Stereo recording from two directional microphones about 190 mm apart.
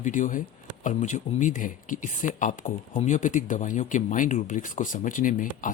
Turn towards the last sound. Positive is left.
turn(degrees=45)  # may be behind; listen again after turning